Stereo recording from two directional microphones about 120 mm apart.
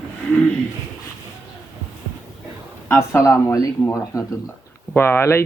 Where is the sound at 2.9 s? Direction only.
25° left (ahead or behind).